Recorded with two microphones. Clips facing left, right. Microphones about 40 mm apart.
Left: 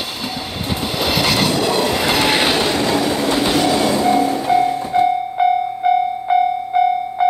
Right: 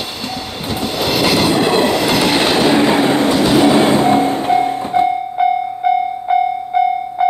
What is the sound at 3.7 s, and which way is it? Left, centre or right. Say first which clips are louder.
Music: right 4 dB; right.